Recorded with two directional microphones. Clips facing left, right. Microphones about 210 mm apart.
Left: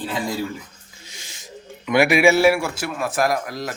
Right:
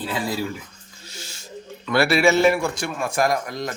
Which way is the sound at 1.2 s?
15° left (ahead or behind).